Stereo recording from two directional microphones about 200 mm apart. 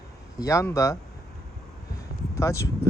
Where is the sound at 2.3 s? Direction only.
15° left (ahead or behind).